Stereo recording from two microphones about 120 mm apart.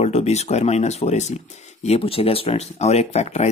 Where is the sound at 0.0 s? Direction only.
65° left (ahead or behind).